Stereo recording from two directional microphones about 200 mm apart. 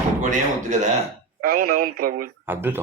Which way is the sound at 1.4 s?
50° right (ahead or behind).